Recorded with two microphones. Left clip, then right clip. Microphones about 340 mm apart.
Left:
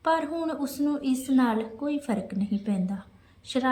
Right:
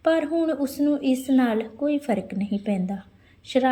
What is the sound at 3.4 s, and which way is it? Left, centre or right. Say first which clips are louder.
Speech: right 7 dB; centre.